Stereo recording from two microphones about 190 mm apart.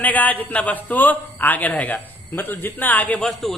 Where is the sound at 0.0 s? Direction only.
10° left (ahead or behind).